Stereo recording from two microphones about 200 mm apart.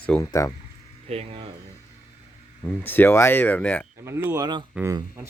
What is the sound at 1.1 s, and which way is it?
Speech, 30° right (ahead or behind).